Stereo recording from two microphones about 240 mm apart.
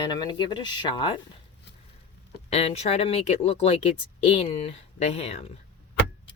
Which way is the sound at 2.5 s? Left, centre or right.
Left.